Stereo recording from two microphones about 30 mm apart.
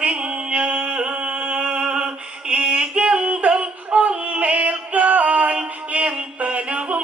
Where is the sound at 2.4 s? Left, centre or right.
Right.